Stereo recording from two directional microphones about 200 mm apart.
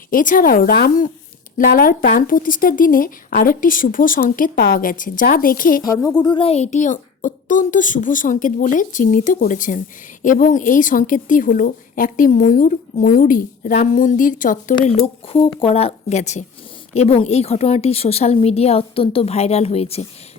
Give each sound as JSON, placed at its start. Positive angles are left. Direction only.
{"t": 0.1, "sound": "speech", "side_deg": 40}
{"t": 6.2, "sound": "a woman's voice", "side_deg": 25}
{"t": 15.0, "sound": "a woman's voice", "side_deg": 30}